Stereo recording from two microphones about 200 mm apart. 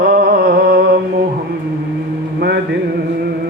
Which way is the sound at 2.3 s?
55° right (ahead or behind).